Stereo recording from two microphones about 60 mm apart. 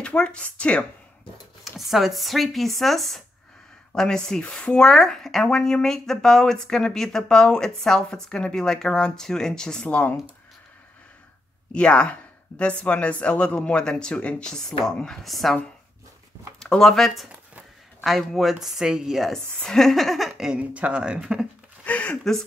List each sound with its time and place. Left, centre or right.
0.0 s a man's voice: centre
1.6 s speech: centre
9.8 s a man's voice: left
11.7 s a man's voice: centre
14.5 s speech: centre
16.5 s speech: centre
19.3 s speech: centre
20.7 s speech: right
21.8 s speech: left